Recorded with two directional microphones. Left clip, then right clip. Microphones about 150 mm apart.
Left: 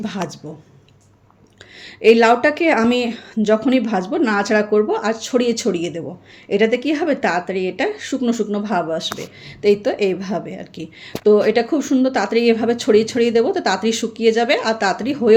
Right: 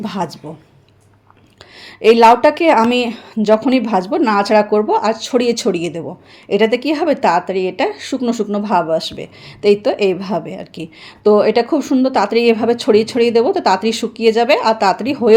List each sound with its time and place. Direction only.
0.0 s speech: 15° right (ahead or behind)
1.8 s a woman's voice: 15° right (ahead or behind)